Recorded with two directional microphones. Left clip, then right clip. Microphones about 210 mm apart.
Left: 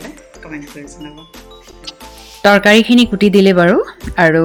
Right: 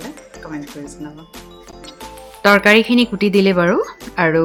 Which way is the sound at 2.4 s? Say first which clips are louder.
Left 2 dB; 15° left (ahead or behind).